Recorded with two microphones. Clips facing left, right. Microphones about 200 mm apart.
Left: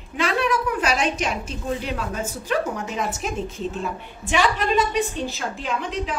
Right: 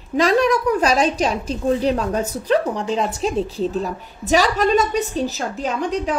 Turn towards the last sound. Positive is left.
turn(degrees=-40)  # may be behind; listen again after turning